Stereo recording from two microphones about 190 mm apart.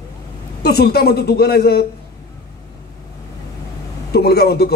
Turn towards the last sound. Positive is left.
turn(degrees=55)  # may be behind; listen again after turning